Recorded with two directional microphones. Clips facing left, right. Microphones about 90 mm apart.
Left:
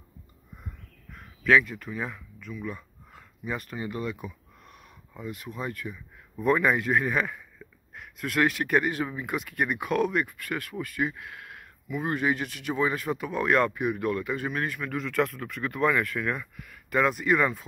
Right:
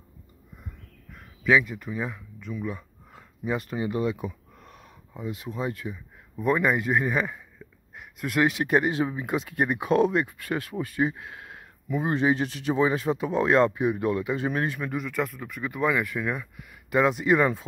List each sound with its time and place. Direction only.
1.4 s speech: 10° right (ahead or behind)
2.1 s speech: 25° right (ahead or behind)
2.7 s a sound: 20° right (ahead or behind)
5.1 s speech: 20° right (ahead or behind)
6.3 s speech: 5° right (ahead or behind); by 14.9 s 30° right (ahead or behind)
14.9 s speech: 10° right (ahead or behind)